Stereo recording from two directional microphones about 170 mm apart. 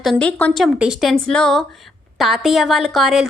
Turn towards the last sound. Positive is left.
turn(degrees=0)  # may be behind; listen again after turning